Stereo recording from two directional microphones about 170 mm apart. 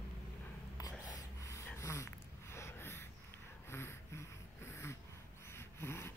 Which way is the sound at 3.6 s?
15° left (ahead or behind).